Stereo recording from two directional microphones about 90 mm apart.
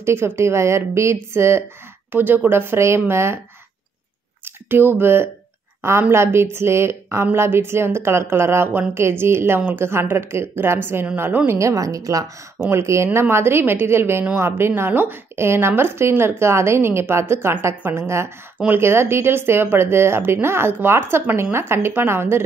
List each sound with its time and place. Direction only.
0.0 s a woman's voice: 30° right (ahead or behind)
4.6 s a woman's voice: 25° right (ahead or behind)